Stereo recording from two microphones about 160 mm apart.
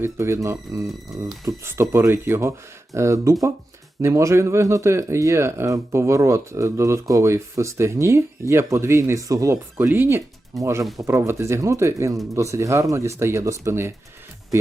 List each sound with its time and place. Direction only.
0.0 s speech: 15° right (ahead or behind)